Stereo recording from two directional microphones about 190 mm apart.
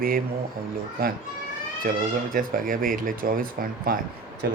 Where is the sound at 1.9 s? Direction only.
50° right (ahead or behind).